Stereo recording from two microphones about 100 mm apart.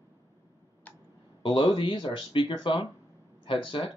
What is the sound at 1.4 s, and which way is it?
Speech, 55° left (ahead or behind).